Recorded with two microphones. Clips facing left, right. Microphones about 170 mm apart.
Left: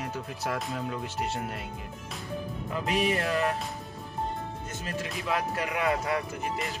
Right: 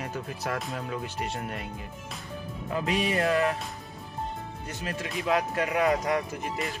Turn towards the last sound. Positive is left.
turn(degrees=-35)  # may be behind; listen again after turning